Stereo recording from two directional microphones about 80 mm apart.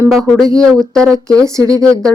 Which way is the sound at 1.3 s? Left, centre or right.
Right.